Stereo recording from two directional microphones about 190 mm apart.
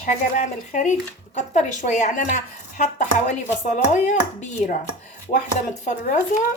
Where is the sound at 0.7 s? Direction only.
40° left (ahead or behind).